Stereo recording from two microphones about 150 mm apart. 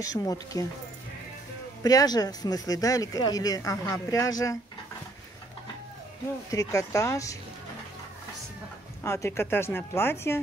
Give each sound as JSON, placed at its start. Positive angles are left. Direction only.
{"t": 0.0, "sound": "speech", "side_deg": 25}
{"t": 1.8, "sound": "speech", "side_deg": 25}
{"t": 6.5, "sound": "speech", "side_deg": 20}
{"t": 9.0, "sound": "speech", "side_deg": 15}